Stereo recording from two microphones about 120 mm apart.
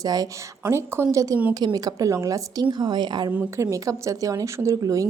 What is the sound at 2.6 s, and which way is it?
Speech, 35° right (ahead or behind).